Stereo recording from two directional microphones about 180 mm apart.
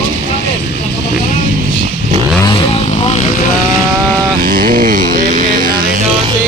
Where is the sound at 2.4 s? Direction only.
30° left (ahead or behind).